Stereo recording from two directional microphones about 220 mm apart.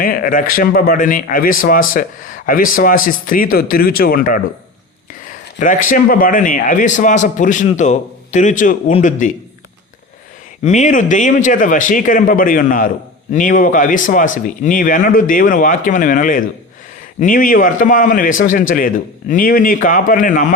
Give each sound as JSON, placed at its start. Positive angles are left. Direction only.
{"t": 0.0, "sound": "a man's voice", "side_deg": 40}
{"t": 10.6, "sound": "a man's voice", "side_deg": 30}